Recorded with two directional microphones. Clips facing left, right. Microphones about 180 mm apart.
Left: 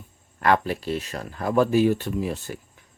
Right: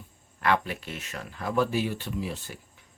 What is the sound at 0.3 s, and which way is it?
Speech, 45° left (ahead or behind).